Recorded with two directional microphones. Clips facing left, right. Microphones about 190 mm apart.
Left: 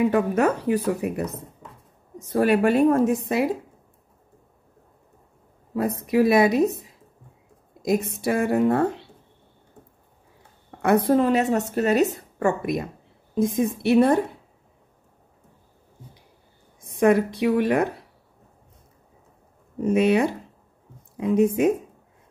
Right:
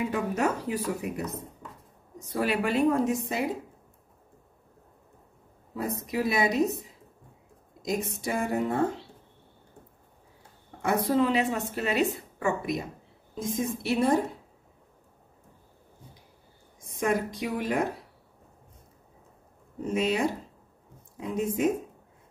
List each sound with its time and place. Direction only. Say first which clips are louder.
0.1 s a woman's voice: left 7 dB; 60° left (ahead or behind)
2.1 s a woman's voice: left 8 dB; 45° left (ahead or behind)
5.8 s a woman's voice: left 9 dB; 65° left (ahead or behind)
10.8 s a woman's voice: left 6 dB; 55° left (ahead or behind)
16.8 s a woman's voice: left 9 dB; 65° left (ahead or behind)
19.8 s a woman's voice: left 7 dB; 65° left (ahead or behind)